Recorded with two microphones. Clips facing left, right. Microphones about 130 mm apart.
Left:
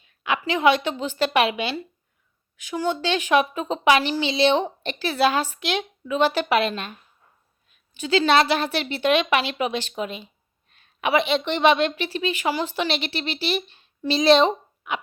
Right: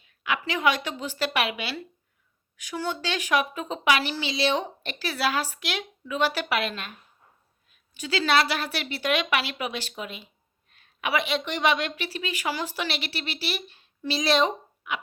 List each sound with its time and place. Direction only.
0.0 s a woman's voice: 25° left (ahead or behind)